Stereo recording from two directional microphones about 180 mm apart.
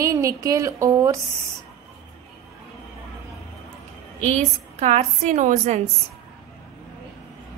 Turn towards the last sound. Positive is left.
turn(degrees=-45)  # may be behind; listen again after turning